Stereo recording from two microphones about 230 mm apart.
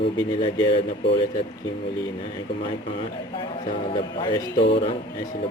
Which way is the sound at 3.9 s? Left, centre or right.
Left.